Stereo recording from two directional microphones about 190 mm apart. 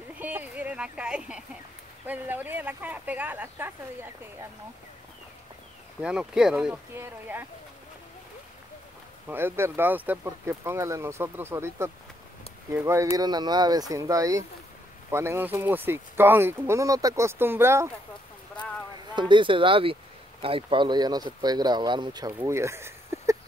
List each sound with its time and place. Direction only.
0.2 s a sound: 10° right (ahead or behind)
2.0 s speech: 10° right (ahead or behind)
5.9 s speech: 5° right (ahead or behind)
9.3 s speech: 10° right (ahead or behind)
19.1 s speech: 25° right (ahead or behind)